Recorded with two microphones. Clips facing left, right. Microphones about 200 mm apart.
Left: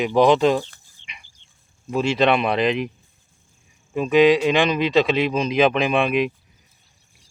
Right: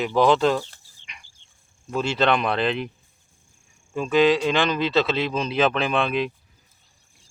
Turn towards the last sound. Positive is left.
turn(degrees=15)  # may be behind; listen again after turning